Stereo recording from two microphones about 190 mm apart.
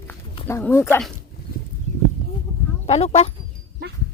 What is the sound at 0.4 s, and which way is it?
Speech, 15° left (ahead or behind).